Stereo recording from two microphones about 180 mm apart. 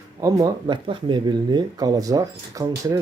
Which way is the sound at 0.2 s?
20° right (ahead or behind).